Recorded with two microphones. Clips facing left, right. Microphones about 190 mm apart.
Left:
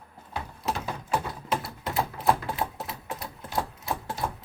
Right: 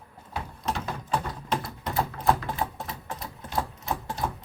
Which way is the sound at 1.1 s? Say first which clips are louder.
Even; 5° left (ahead or behind).